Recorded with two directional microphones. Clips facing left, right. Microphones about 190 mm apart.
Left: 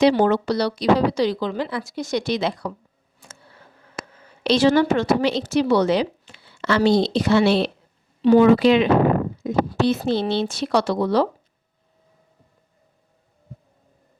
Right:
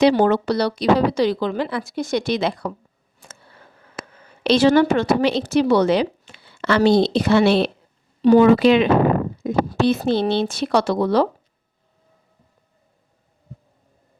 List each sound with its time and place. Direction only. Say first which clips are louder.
0.1 s a woman's voice: right 1 dB; 55° right (ahead or behind)
4.4 s a woman's voice: right 2 dB; 55° right (ahead or behind)
8.2 s a woman's voice: right 1 dB; 45° right (ahead or behind)